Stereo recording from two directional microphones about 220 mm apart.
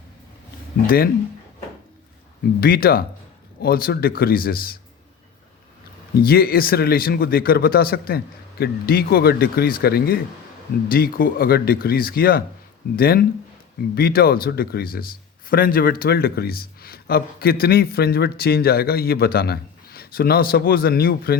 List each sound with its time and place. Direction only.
0.9 s speech: 40° left (ahead or behind)
2.6 s speech: 45° left (ahead or behind)
6.1 s speech: 45° left (ahead or behind)